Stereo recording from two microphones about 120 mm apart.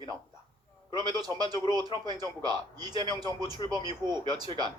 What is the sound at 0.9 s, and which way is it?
Speech, 35° right (ahead or behind).